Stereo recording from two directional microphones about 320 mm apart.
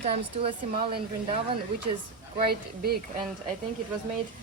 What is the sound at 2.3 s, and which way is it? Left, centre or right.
Speech, right.